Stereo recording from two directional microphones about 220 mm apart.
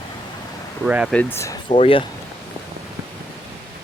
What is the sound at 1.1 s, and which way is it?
Speech, 10° left (ahead or behind).